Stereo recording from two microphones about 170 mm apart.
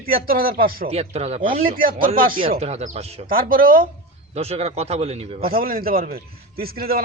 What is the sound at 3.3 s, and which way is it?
Speech, 55° right (ahead or behind).